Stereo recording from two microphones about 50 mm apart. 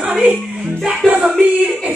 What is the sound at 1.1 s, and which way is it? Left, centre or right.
Music, right.